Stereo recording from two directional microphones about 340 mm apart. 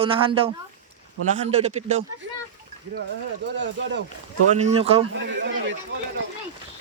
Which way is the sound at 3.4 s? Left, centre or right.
Right.